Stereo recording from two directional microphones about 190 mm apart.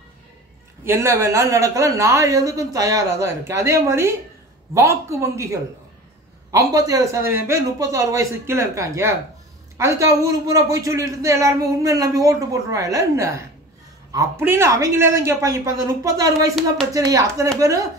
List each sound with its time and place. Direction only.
0.8 s a man's voice: 15° right (ahead or behind)